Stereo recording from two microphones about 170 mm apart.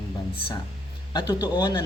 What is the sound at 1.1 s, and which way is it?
Speech, 25° left (ahead or behind).